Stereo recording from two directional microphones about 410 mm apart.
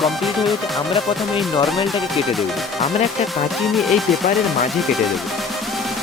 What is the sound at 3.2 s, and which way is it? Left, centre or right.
Speech, centre.